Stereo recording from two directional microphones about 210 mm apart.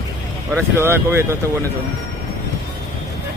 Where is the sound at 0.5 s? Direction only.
10° right (ahead or behind).